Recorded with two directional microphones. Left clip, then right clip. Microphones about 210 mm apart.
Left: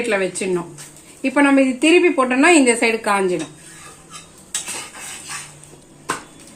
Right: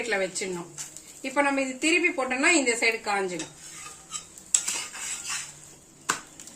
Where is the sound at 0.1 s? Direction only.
35° left (ahead or behind).